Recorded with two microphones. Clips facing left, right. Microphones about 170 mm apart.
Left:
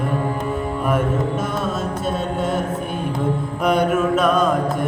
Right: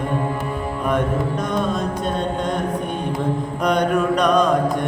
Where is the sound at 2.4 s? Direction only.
5° left (ahead or behind).